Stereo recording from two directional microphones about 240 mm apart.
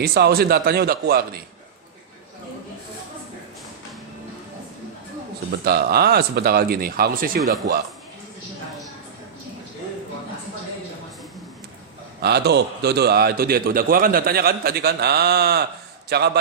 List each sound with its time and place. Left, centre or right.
0.0 s a man's voice: right
5.5 s a man's voice: right
12.2 s a man's voice: right